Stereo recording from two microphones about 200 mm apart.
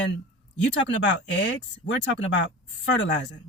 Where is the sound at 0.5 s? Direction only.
65° left (ahead or behind).